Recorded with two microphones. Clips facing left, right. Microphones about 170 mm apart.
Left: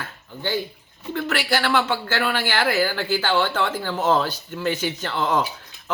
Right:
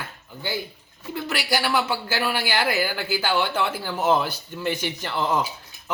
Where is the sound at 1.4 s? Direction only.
10° right (ahead or behind).